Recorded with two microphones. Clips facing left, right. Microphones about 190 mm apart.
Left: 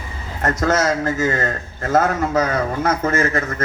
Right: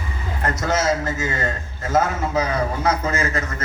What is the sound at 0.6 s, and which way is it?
A man's voice, 50° left (ahead or behind).